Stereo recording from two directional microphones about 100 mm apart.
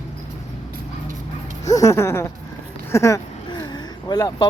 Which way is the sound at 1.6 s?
35° left (ahead or behind).